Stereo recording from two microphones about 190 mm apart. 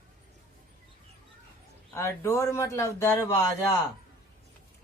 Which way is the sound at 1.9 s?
15° left (ahead or behind).